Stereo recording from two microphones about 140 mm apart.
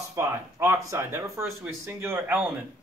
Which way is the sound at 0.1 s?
20° right (ahead or behind).